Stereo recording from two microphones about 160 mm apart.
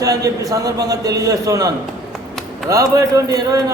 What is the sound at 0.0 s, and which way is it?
A man's voice, 20° right (ahead or behind).